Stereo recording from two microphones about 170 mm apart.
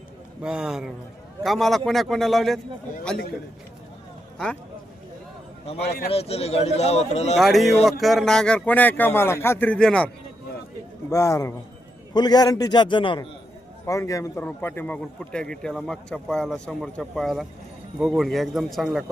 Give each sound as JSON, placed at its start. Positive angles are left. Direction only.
{"t": 0.4, "sound": "speech", "side_deg": -5}
{"t": 5.8, "sound": "speech", "side_deg": 70}
{"t": 6.1, "sound": "speech", "side_deg": 35}
{"t": 7.3, "sound": "speech", "side_deg": 0}
{"t": 11.1, "sound": "a man's voice", "side_deg": 20}